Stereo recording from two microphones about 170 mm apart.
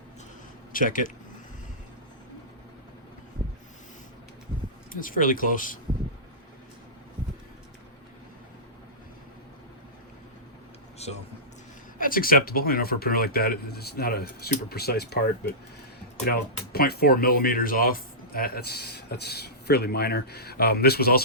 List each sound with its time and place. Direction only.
0.7 s speech: 55° left (ahead or behind)
4.9 s speech: 55° left (ahead or behind)
11.0 s a sound: 40° left (ahead or behind)
11.9 s a man's voice: 55° left (ahead or behind)
16.7 s speech: 65° left (ahead or behind)